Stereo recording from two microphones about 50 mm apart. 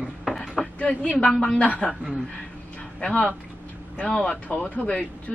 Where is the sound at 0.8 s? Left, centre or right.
Centre.